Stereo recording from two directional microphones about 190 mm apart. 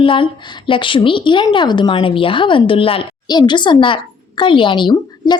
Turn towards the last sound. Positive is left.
turn(degrees=25)  # may be behind; listen again after turning